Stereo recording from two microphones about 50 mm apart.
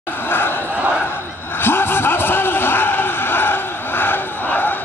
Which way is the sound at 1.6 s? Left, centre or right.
Left.